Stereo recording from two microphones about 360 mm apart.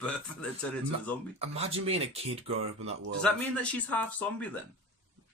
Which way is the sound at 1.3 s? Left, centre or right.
Centre.